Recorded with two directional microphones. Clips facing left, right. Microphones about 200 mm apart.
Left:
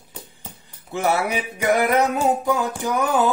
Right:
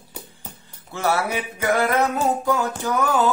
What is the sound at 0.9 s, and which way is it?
Music, 15° left (ahead or behind).